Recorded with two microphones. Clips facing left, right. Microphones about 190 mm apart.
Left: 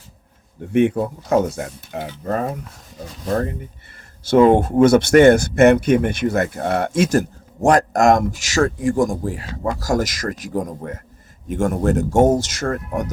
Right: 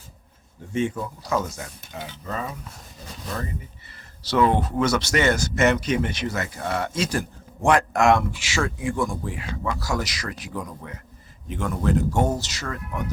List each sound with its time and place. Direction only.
0.6 s speech: 60° left (ahead or behind)